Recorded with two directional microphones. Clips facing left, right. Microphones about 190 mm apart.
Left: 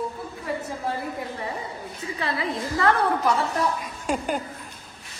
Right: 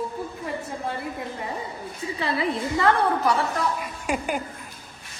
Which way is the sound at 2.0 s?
30° right (ahead or behind).